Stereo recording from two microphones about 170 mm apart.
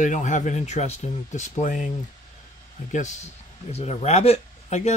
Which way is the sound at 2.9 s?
45° left (ahead or behind).